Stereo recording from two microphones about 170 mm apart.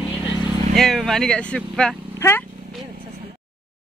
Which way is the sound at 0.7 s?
Centre (ahead or behind).